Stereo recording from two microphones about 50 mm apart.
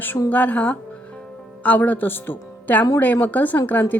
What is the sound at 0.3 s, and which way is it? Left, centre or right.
Speech, left.